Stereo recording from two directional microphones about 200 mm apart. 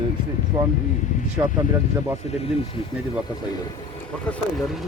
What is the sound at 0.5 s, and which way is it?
Speech, 15° right (ahead or behind).